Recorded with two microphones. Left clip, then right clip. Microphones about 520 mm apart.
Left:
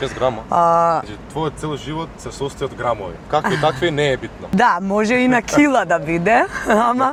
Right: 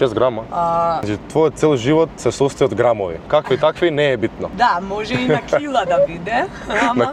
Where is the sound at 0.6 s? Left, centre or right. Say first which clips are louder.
Left 4 dB; left.